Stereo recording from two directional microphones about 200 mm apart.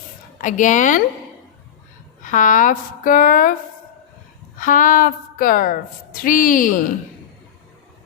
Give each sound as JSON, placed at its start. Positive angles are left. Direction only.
{"t": 0.4, "sound": "speech", "side_deg": 40}
{"t": 2.3, "sound": "a woman's voice", "side_deg": 40}